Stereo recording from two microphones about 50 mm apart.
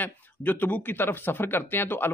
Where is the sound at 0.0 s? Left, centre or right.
Left.